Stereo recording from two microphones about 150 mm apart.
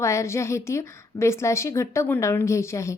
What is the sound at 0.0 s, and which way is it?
A woman's voice, 20° left (ahead or behind).